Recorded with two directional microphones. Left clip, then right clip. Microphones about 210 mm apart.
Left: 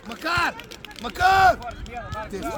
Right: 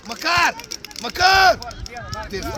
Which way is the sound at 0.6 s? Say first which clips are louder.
Right 5 dB; 45° right (ahead or behind).